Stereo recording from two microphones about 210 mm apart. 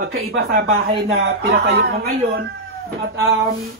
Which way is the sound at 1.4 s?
50° right (ahead or behind).